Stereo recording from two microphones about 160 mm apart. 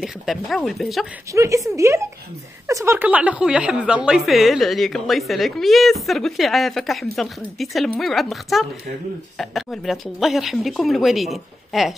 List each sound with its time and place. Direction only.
0.0 s a woman's voice: centre (ahead or behind)
1.3 s a woman's voice: 20° right (ahead or behind); by 11.9 s centre (ahead or behind)